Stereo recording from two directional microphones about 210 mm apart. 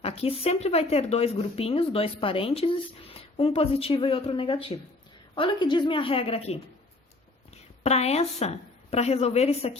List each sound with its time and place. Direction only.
0.0 s a woman's voice: 30° left (ahead or behind)